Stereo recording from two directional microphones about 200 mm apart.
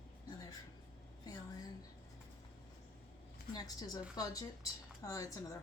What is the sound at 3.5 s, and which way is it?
A woman's voice, 20° left (ahead or behind).